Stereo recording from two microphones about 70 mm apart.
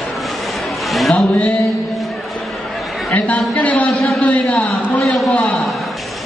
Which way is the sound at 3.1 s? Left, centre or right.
Centre.